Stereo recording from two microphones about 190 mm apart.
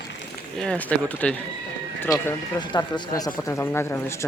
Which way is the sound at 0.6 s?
5° left (ahead or behind).